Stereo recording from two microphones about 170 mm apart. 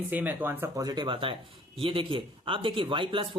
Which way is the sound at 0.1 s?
10° right (ahead or behind).